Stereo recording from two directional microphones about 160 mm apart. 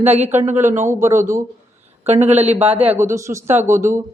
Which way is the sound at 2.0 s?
45° right (ahead or behind).